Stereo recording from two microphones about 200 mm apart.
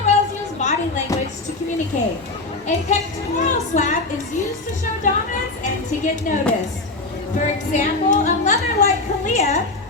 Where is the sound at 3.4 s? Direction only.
35° left (ahead or behind).